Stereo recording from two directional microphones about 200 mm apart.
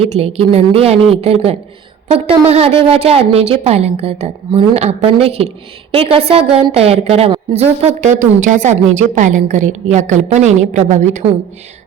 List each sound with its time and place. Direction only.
0.0 s a woman's voice: 30° right (ahead or behind)